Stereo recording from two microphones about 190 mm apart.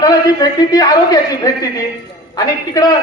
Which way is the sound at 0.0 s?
20° left (ahead or behind).